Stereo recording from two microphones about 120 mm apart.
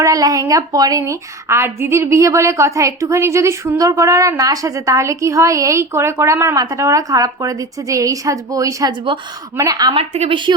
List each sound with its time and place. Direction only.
0.0 s a woman's voice: 30° right (ahead or behind)
9.1 s a woman's voice: 45° right (ahead or behind)
9.6 s a woman's voice: 30° right (ahead or behind)
10.2 s a woman's voice: 45° right (ahead or behind)